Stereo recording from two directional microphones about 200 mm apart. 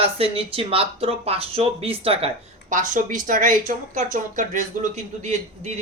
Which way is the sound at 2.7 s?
40° right (ahead or behind).